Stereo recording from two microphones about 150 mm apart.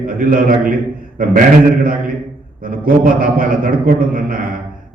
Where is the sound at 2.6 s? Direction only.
70° right (ahead or behind).